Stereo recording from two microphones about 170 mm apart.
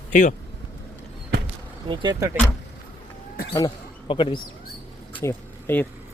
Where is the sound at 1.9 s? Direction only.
25° right (ahead or behind).